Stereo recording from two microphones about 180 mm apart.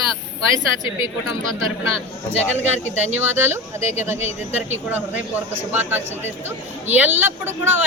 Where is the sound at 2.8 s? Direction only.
10° right (ahead or behind).